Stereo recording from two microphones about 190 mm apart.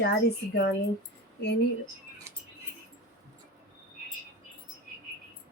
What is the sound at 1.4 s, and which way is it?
Speech, 60° left (ahead or behind).